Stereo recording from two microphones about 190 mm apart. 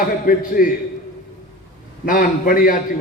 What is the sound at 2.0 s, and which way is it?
Speech, 50° left (ahead or behind).